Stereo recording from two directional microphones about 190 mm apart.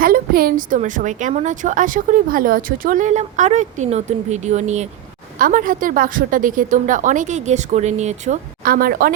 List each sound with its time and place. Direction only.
0.0 s a woman's voice: 50° right (ahead or behind)